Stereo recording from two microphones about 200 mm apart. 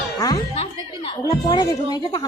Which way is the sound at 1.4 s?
20° left (ahead or behind).